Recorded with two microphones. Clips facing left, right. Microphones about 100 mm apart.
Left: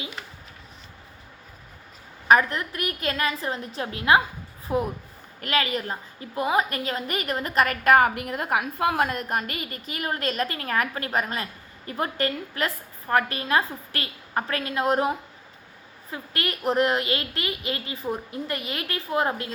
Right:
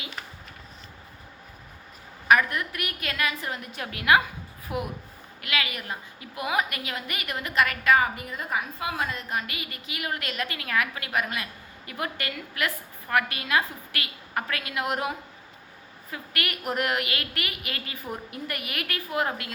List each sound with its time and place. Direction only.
2.2 s a woman's voice: 30° left (ahead or behind)
16.1 s a woman's voice: 30° left (ahead or behind)